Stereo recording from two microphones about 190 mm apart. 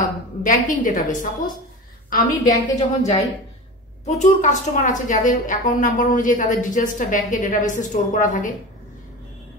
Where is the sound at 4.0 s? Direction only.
40° left (ahead or behind).